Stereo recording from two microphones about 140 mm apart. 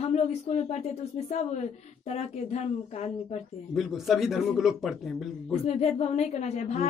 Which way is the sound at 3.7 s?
Centre (ahead or behind).